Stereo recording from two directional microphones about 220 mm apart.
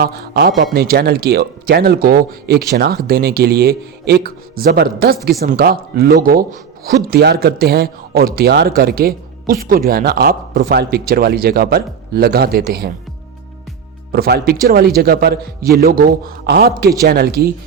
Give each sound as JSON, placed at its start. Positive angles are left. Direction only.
{"t": 0.0, "sound": "a man's voice", "side_deg": -45}
{"t": 14.1, "sound": "a man's voice", "side_deg": -45}